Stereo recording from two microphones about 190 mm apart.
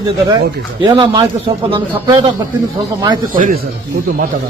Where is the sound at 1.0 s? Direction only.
25° right (ahead or behind).